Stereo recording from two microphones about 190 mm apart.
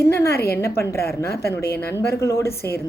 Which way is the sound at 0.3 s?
55° left (ahead or behind).